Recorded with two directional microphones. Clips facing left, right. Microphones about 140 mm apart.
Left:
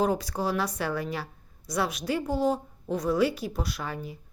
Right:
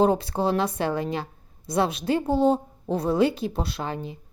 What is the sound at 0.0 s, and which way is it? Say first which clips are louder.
A woman's voice: right 5 dB; 25° right (ahead or behind).